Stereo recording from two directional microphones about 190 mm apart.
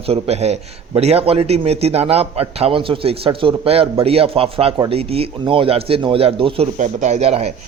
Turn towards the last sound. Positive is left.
turn(degrees=-35)  # may be behind; listen again after turning